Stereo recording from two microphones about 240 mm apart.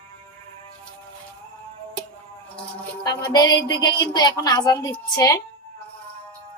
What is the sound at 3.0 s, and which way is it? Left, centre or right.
Music, centre.